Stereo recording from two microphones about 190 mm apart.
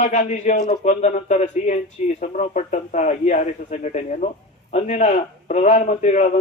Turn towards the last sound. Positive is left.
turn(degrees=40)  # may be behind; listen again after turning